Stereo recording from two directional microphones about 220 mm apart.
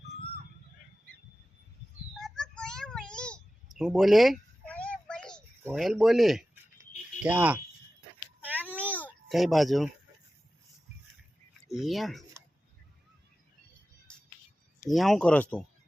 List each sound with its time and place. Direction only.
2.1 s a sound: 5° left (ahead or behind)
5.6 s speech: centre (ahead or behind)
8.4 s a sound: 10° right (ahead or behind)
8.7 s babbling: 5° left (ahead or behind)
9.0 s speech: centre (ahead or behind)
11.7 s speech: centre (ahead or behind)
14.8 s speech: centre (ahead or behind)